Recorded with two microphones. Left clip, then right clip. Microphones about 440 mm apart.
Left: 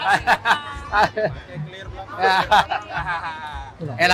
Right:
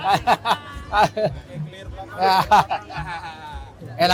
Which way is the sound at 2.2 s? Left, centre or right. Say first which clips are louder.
Right 1 dB; right.